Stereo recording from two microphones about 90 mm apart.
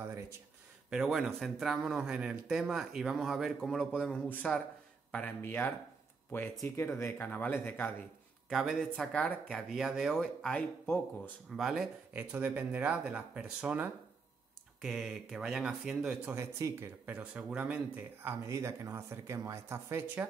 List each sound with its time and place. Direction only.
0.8 s speech: 5° right (ahead or behind); by 7.9 s 25° left (ahead or behind)
8.5 s speech: centre (ahead or behind)
8.9 s speech: 15° left (ahead or behind)
9.6 s speech: centre (ahead or behind)
10.2 s speech: 10° left (ahead or behind)
11.5 s speech: 5° right (ahead or behind)
12.1 s speech: 15° right (ahead or behind)
14.8 s speech: 5° right (ahead or behind)
16.3 s speech: 30° right (ahead or behind)
17.0 s speech: 20° right (ahead or behind)
18.2 s speech: 30° right (ahead or behind)